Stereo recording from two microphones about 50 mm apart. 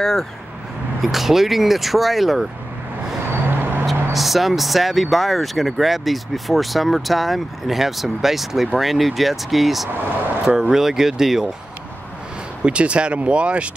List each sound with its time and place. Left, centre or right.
0.0 s speech: centre
1.0 s speech: centre
3.4 s vehicle: right
4.1 s speech: centre
12.6 s speech: right